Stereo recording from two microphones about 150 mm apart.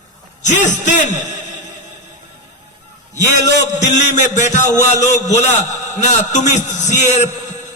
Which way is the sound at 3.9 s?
55° left (ahead or behind).